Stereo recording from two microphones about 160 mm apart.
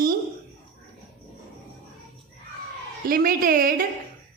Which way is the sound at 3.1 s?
65° right (ahead or behind).